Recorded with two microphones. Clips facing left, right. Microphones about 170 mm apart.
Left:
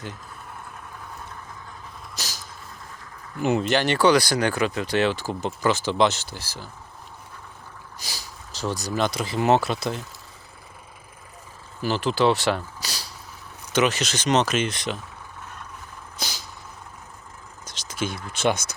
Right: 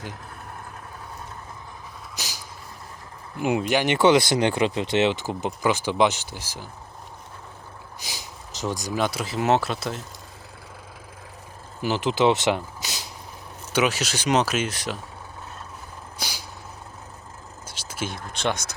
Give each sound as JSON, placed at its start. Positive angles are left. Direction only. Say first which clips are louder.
{"t": 2.1, "sound": "vehicle", "louder": "even", "side_deg": -15}
{"t": 3.4, "sound": "speech", "louder": "left 1 dB", "side_deg": -10}
{"t": 7.9, "sound": "speech", "louder": "right 1 dB", "side_deg": -15}
{"t": 11.8, "sound": "speech", "louder": "even", "side_deg": -15}
{"t": 13.7, "sound": "speech", "louder": "left 1 dB", "side_deg": -10}
{"t": 17.7, "sound": "whispering", "louder": "left 3 dB", "side_deg": -5}
{"t": 18.3, "sound": "speech", "louder": "left 4 dB", "side_deg": 5}